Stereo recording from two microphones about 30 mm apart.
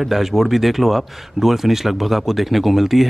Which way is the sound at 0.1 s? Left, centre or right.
Centre.